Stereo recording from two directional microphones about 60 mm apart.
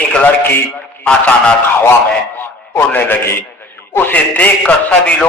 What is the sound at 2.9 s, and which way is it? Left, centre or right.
A man's voice, left.